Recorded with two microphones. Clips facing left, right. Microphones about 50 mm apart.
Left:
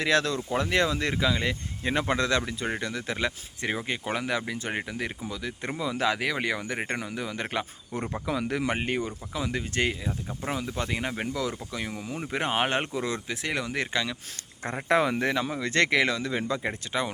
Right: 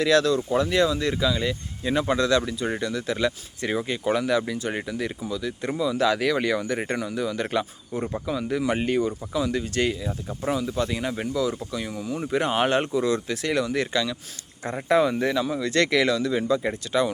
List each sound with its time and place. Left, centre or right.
0.0 s speech: left
6.1 s speech: centre
8.3 s speech: left
8.7 s speech: left
14.8 s speech: left